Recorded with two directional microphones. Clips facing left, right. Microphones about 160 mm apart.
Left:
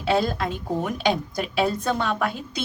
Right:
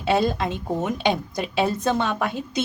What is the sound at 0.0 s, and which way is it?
A woman's voice, 20° right (ahead or behind).